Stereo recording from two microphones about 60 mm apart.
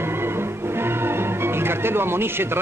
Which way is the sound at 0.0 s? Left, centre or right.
Right.